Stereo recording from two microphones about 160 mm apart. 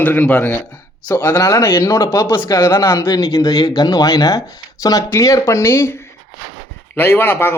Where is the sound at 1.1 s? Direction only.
20° left (ahead or behind).